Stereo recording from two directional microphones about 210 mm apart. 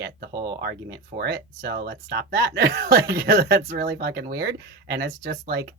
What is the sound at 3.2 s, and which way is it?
Speech, 50° right (ahead or behind).